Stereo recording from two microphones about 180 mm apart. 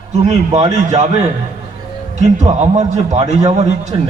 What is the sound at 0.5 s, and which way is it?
Speech, 40° right (ahead or behind).